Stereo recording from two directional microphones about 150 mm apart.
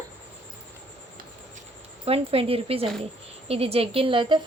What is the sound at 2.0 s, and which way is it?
A woman's voice, 40° right (ahead or behind).